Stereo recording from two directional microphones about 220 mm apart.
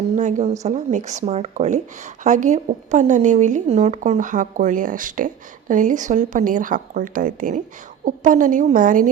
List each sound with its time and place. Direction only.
0.2 s a woman's voice: 30° right (ahead or behind)